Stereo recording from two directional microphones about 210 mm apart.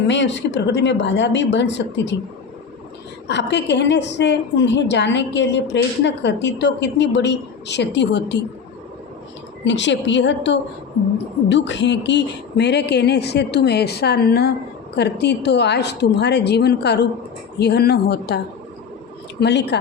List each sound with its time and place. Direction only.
0.1 s a woman's voice: 60° left (ahead or behind)
3.2 s a woman's voice: 55° left (ahead or behind)
9.6 s a woman's voice: 60° left (ahead or behind)
19.4 s a man's voice: 55° left (ahead or behind)